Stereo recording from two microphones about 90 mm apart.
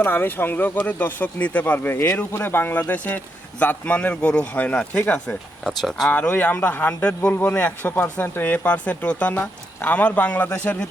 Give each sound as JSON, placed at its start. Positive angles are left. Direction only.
{"t": 0.0, "sound": "speech", "side_deg": 25}
{"t": 5.6, "sound": "speech", "side_deg": 5}
{"t": 6.1, "sound": "speech", "side_deg": 20}